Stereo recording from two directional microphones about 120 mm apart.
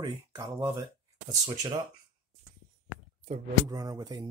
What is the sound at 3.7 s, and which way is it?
Speech, 35° right (ahead or behind).